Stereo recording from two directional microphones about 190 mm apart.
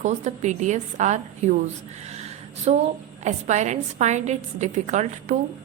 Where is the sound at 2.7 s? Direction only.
35° right (ahead or behind).